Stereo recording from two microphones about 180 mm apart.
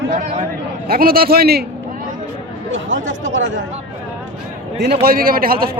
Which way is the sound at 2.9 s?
90° right.